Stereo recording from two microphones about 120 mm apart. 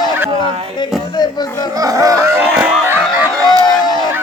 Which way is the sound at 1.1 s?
35° left (ahead or behind).